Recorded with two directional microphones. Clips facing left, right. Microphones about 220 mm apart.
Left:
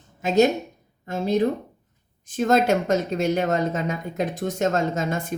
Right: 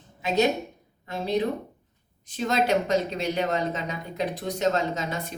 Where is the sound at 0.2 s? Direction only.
45° left (ahead or behind).